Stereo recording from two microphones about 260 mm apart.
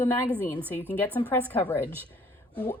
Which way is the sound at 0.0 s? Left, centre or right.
Centre.